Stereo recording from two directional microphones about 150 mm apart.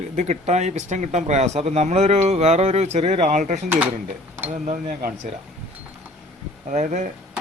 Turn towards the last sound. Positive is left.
turn(degrees=-55)  # may be behind; listen again after turning